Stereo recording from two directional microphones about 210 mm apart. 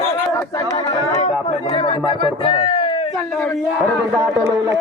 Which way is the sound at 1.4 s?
25° left (ahead or behind).